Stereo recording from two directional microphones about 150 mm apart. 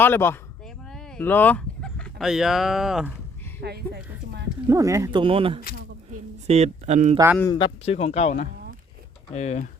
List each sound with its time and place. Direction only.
0.0 s speech: 15° left (ahead or behind)
0.9 s speech: 5° left (ahead or behind)
3.6 s a sound: 90° right
4.7 s speech: 20° right (ahead or behind)
5.1 s speech: 35° right (ahead or behind)
6.5 s speech: 50° right (ahead or behind)
7.5 s speech: 35° left (ahead or behind)
7.9 s speech: 45° left (ahead or behind)